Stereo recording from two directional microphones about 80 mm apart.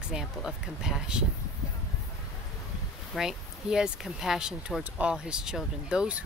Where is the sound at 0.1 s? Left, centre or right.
Centre.